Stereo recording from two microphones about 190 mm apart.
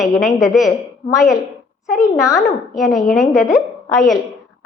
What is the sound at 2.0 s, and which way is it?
Speech, 15° left (ahead or behind).